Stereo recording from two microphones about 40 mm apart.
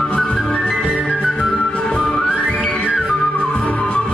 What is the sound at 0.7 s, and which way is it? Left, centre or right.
Music, left.